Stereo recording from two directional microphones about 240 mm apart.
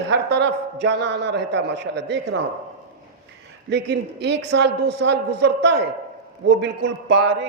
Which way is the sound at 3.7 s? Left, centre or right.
Right.